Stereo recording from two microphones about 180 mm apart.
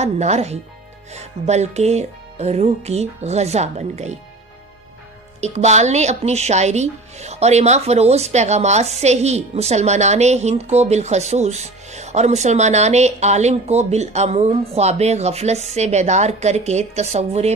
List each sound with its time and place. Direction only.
0.0 s speech: 40° right (ahead or behind)
5.4 s speech: 40° right (ahead or behind)